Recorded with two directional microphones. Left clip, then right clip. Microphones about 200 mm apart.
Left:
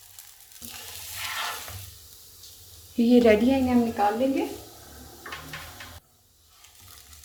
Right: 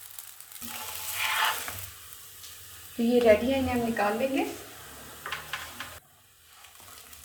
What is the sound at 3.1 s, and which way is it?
Speech, 55° left (ahead or behind).